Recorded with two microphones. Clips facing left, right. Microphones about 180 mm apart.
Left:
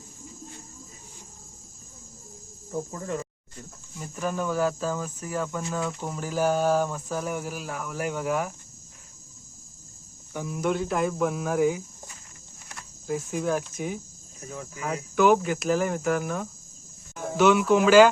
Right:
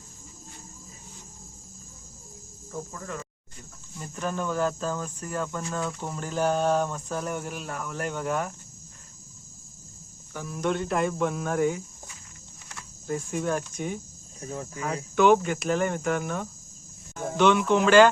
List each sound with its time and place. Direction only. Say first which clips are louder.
2.9 s speech: left 5 dB; 30° left (ahead or behind)
3.9 s speech: left 1 dB; 5° left (ahead or behind)
10.3 s speech: left 1 dB; 15° left (ahead or behind)
13.1 s speech: left 1 dB; 5° left (ahead or behind)